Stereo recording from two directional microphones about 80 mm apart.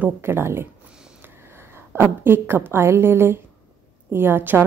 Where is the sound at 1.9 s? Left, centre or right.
Right.